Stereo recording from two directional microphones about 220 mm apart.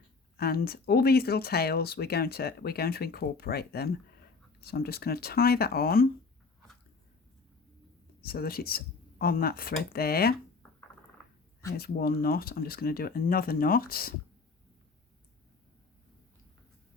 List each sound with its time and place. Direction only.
0.3 s speech: 45° left (ahead or behind)
8.2 s speech: 45° left (ahead or behind)
11.8 s speech: 45° left (ahead or behind)